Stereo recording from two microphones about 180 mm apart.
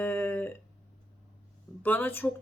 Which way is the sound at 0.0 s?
10° left (ahead or behind).